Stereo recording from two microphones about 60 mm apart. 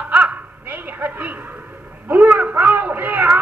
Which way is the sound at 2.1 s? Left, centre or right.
Right.